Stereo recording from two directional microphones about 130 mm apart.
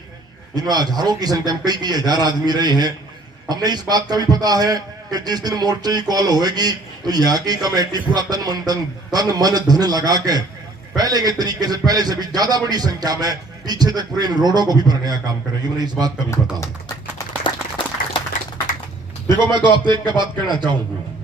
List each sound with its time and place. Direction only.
0.5 s a man's voice: 30° right (ahead or behind)
19.3 s a man's voice: 35° right (ahead or behind)